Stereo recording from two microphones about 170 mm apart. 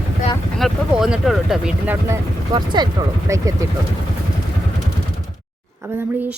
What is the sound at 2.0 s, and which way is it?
A woman's voice, 20° right (ahead or behind).